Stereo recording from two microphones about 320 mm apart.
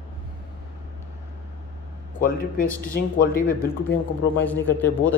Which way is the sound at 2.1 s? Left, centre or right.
Left.